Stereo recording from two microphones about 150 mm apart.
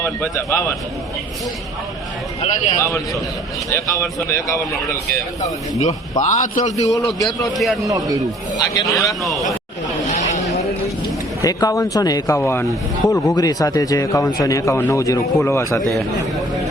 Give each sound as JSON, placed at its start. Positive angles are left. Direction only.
{"t": 0.0, "sound": "a man's voice", "side_deg": 15}
{"t": 2.7, "sound": "a man's voice", "side_deg": 20}
{"t": 5.8, "sound": "a man's voice", "side_deg": 55}
{"t": 7.6, "sound": "a man's voice", "side_deg": 0}
{"t": 7.9, "sound": "speech", "side_deg": -25}
{"t": 8.5, "sound": "a man's voice", "side_deg": 25}
{"t": 9.2, "sound": "a man's voice", "side_deg": 0}
{"t": 10.1, "sound": "a sound", "side_deg": 55}
{"t": 11.4, "sound": "a man's voice", "side_deg": 25}